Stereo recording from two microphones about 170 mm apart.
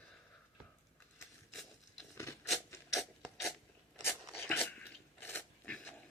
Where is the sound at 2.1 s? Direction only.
15° left (ahead or behind).